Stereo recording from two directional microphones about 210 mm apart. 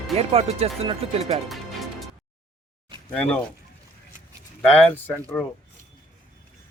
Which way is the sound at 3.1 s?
5° left (ahead or behind).